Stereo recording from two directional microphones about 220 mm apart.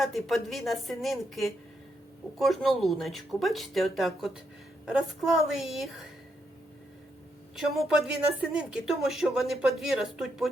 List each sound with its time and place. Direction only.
0.0 s speech: centre (ahead or behind)
7.5 s speech: centre (ahead or behind)